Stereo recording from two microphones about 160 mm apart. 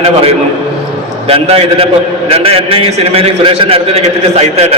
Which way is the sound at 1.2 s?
40° right (ahead or behind).